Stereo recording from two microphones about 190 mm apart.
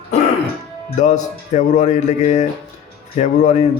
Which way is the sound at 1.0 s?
40° left (ahead or behind).